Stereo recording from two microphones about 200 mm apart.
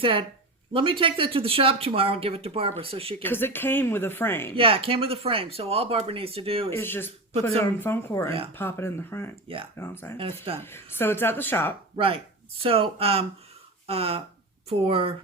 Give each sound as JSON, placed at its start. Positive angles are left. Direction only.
{"t": 0.0, "sound": "speech", "side_deg": -25}
{"t": 3.2, "sound": "speech", "side_deg": 10}
{"t": 4.5, "sound": "speech", "side_deg": -25}
{"t": 6.7, "sound": "speech", "side_deg": 10}
{"t": 11.9, "sound": "speech", "side_deg": -25}